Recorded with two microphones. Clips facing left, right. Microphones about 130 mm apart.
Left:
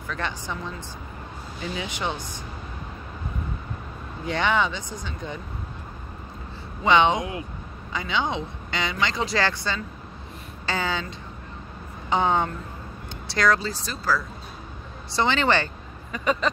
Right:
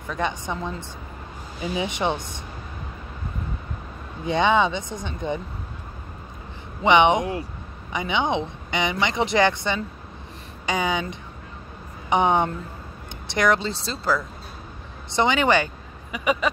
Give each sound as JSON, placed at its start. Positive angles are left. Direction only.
{"t": 0.1, "sound": "a woman's voice", "side_deg": -20}
{"t": 4.3, "sound": "speech", "side_deg": -20}
{"t": 6.8, "sound": "a woman's voice", "side_deg": -20}
{"t": 15.1, "sound": "speech", "side_deg": -15}